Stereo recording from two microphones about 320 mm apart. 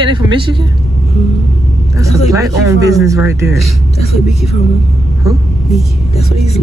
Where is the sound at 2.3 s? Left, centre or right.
Centre.